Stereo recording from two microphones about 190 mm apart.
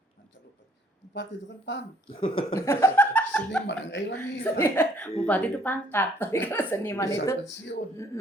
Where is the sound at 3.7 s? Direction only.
70° left (ahead or behind).